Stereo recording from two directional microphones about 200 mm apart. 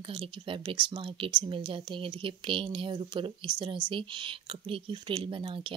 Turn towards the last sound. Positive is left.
turn(degrees=-25)  # may be behind; listen again after turning